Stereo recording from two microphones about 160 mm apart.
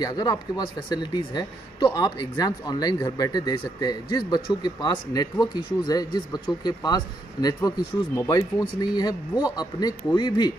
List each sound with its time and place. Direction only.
0.0 s speech: 25° left (ahead or behind)